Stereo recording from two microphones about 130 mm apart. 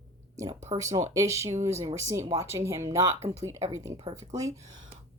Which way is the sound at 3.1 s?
60° right (ahead or behind).